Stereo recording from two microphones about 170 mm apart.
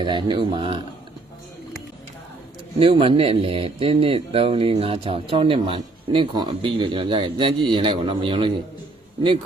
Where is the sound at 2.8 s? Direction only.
30° right (ahead or behind).